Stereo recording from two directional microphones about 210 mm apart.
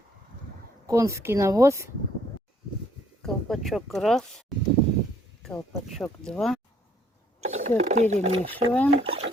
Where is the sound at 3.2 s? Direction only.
Centre (ahead or behind).